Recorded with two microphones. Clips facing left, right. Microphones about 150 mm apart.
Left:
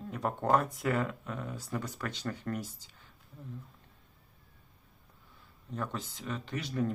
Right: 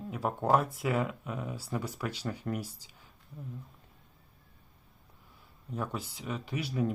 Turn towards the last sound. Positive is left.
turn(degrees=-10)  # may be behind; listen again after turning